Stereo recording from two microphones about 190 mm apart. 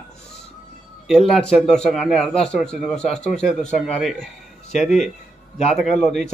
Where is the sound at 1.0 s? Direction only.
Centre (ahead or behind).